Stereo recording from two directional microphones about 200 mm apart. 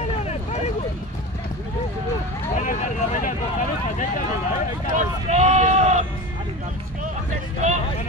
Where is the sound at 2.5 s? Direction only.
40° left (ahead or behind).